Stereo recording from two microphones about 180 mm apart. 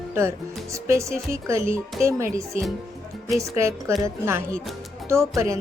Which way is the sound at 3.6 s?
15° right (ahead or behind).